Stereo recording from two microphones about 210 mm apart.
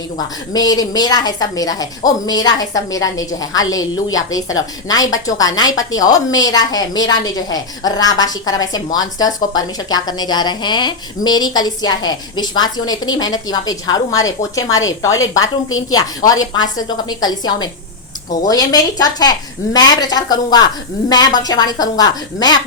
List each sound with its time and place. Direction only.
0.5 s a woman's voice: 20° left (ahead or behind)
15.9 s a woman's voice: 20° left (ahead or behind)